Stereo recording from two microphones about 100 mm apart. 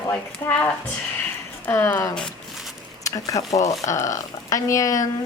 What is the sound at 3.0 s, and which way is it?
Speech, 35° left (ahead or behind).